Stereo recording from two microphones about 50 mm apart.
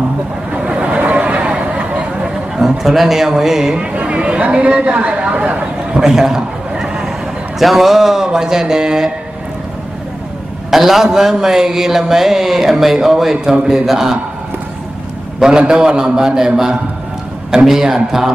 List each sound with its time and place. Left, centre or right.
0.5 s a sound: right
2.5 s a man's voice: centre
3.8 s speech: right
6.0 s a man's voice: centre
6.7 s vehicle: centre
7.5 s a man's voice: centre
10.7 s a man's voice: centre
15.4 s a man's voice: centre